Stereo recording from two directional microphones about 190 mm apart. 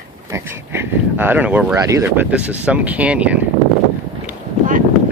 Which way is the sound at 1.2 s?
10° right (ahead or behind).